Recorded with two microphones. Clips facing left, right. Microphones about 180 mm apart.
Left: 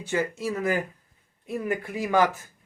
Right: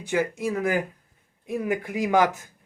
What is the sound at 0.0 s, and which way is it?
Speech, 15° right (ahead or behind).